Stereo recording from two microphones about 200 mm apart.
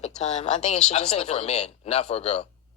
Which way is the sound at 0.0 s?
35° left (ahead or behind).